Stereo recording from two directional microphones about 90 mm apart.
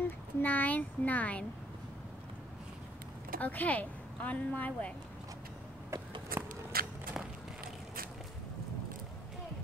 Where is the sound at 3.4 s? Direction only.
15° left (ahead or behind).